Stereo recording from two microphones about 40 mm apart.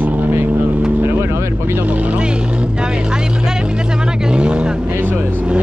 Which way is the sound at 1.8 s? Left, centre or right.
Right.